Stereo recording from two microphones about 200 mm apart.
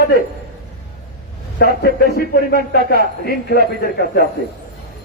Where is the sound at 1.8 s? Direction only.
50° left (ahead or behind).